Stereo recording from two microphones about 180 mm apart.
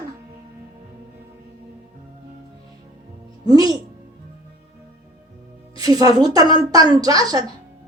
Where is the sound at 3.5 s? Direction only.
20° right (ahead or behind).